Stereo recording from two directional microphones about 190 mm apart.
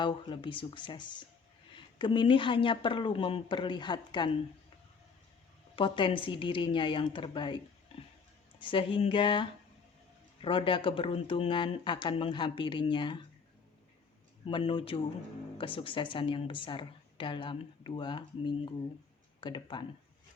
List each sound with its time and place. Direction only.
0.0 s a woman's voice: 25° left (ahead or behind)
5.7 s a woman's voice: 25° left (ahead or behind)
7.9 s a sound: 30° left (ahead or behind)
8.5 s a woman's voice: 25° left (ahead or behind)
14.4 s a woman's voice: 25° left (ahead or behind)